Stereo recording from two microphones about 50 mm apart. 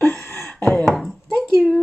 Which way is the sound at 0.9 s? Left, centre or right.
Centre.